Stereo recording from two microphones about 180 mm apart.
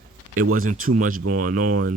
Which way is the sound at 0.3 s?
50° right (ahead or behind).